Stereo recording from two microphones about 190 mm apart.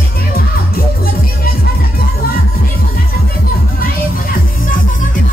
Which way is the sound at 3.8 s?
50° left (ahead or behind).